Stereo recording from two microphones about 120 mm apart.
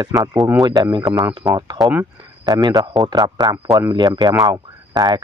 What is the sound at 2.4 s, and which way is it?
Speech, 35° right (ahead or behind).